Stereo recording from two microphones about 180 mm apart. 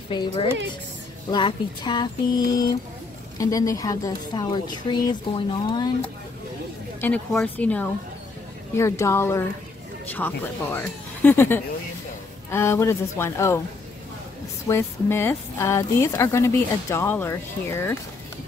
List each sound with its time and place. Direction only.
0.1 s a sound: 25° left (ahead or behind)
7.0 s speech: 10° left (ahead or behind)
14.7 s speech: 15° left (ahead or behind)